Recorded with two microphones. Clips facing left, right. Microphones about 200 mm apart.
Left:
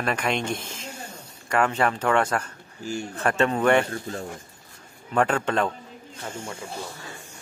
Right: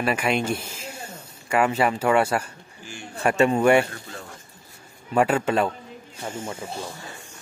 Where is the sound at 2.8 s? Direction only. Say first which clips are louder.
Left 9 dB; 40° left (ahead or behind).